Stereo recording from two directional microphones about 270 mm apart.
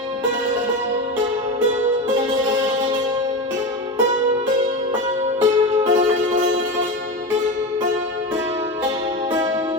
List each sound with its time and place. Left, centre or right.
5.4 s music: right